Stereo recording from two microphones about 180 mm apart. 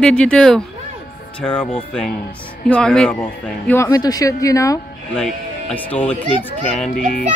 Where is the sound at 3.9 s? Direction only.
20° left (ahead or behind).